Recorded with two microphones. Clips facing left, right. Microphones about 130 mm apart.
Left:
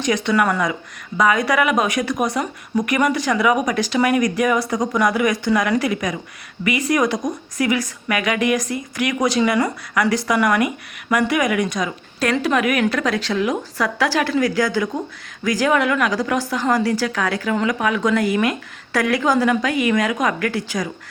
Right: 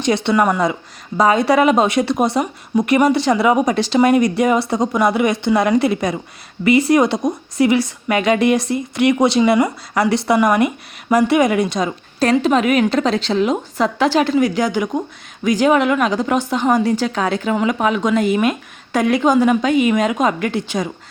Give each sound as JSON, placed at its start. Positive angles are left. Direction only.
{"t": 0.0, "sound": "speech", "side_deg": -30}
{"t": 0.6, "sound": "speech", "side_deg": -30}